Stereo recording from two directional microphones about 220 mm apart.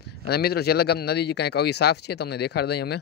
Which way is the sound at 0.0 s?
45° left (ahead or behind).